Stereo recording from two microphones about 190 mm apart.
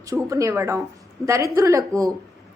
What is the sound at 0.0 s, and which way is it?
A woman's voice, 15° right (ahead or behind).